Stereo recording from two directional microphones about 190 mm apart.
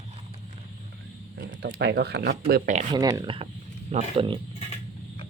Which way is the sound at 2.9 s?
20° right (ahead or behind).